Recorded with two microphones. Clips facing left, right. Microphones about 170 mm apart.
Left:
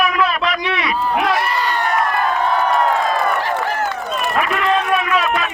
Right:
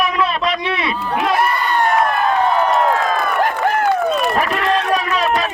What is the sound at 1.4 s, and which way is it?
Crowd, 50° right (ahead or behind).